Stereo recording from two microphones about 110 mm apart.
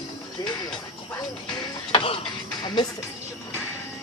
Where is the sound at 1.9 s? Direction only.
55° left (ahead or behind).